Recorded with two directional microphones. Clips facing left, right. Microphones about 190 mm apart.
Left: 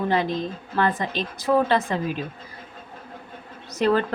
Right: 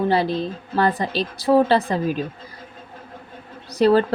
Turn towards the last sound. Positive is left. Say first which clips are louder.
# right 5 dB
turn(degrees=-35)  # may be behind; listen again after turning